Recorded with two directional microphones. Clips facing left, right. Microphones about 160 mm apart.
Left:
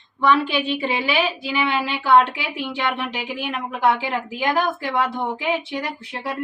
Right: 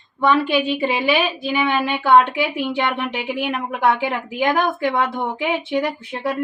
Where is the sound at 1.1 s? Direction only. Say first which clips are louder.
Right 2 dB; 45° right (ahead or behind).